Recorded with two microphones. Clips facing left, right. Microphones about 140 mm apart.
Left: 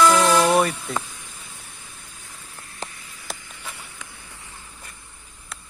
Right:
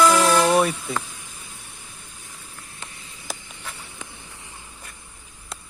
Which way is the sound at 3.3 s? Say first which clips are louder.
Even; centre (ahead or behind).